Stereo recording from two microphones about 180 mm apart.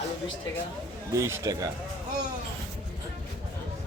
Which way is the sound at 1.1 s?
15° right (ahead or behind).